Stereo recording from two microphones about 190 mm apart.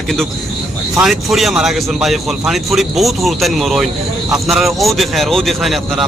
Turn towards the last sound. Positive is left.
turn(degrees=0)  # may be behind; listen again after turning